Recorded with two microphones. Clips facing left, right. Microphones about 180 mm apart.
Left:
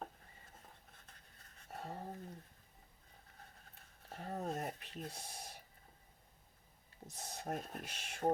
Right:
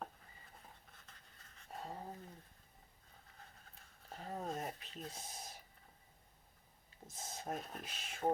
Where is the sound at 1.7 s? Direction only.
70° left (ahead or behind).